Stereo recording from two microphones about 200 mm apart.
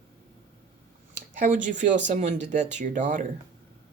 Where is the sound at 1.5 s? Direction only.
40° right (ahead or behind).